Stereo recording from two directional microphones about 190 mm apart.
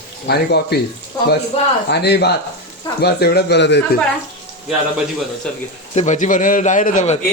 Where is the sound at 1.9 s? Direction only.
60° left (ahead or behind).